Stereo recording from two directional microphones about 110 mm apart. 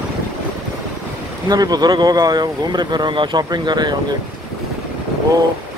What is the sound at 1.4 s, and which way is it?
Speech, 35° right (ahead or behind).